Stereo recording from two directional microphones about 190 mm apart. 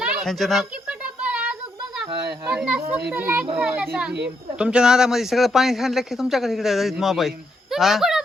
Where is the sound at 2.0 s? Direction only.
25° right (ahead or behind).